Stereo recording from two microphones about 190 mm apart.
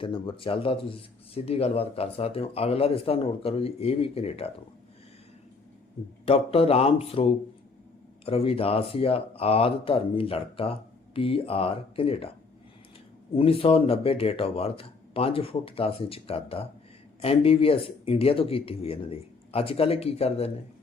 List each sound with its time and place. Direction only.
0.0 s speech: 30° left (ahead or behind)
6.2 s speech: 30° left (ahead or behind)
13.3 s speech: 30° left (ahead or behind)